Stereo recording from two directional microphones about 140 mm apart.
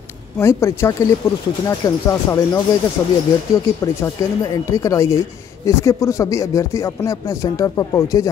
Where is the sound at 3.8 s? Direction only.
25° left (ahead or behind).